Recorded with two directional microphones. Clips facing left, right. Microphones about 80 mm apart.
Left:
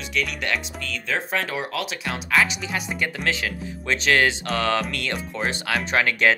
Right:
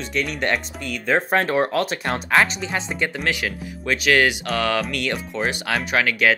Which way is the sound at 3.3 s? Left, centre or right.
Centre.